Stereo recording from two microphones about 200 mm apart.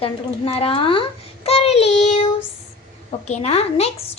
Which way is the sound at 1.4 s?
30° left (ahead or behind).